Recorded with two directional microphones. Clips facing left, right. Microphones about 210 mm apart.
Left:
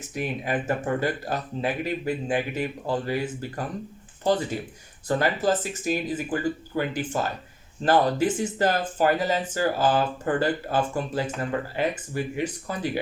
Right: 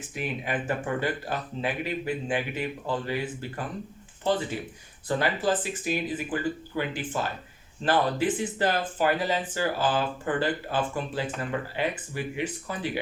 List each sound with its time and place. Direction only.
0.1 s speech: 40° left (ahead or behind)